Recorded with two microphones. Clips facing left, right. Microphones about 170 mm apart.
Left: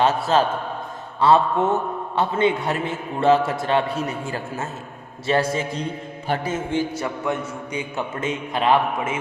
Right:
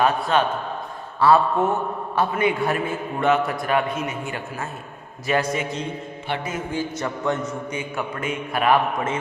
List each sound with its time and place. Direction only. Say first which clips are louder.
0.3 s a man's voice: left 3 dB; 30° left (ahead or behind)
1.2 s a man's voice: even; 20° left (ahead or behind)
6.2 s mantra: left 4 dB; 40° left (ahead or behind)
6.5 s a man's voice: left 3 dB; 25° left (ahead or behind)
7.0 s a man's voice: right 1 dB; 10° left (ahead or behind)